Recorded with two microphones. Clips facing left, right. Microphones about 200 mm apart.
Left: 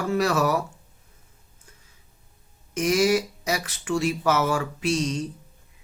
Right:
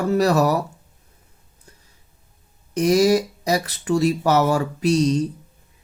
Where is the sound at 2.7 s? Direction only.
35° right (ahead or behind).